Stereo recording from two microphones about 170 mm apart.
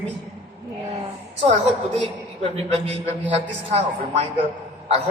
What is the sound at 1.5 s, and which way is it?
A woman's voice, 40° right (ahead or behind).